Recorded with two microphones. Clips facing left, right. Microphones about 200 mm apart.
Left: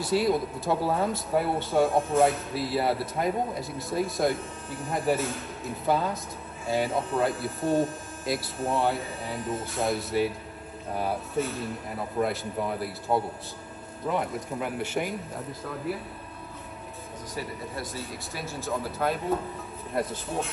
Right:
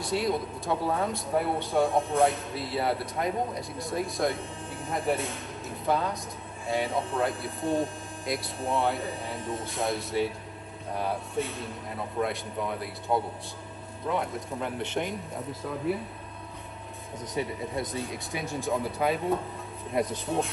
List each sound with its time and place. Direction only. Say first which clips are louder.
0.0 s speech: left 4 dB; centre (ahead or behind)
17.4 s speech: right 5 dB; 20° right (ahead or behind)
17.7 s speech: right 5 dB; centre (ahead or behind)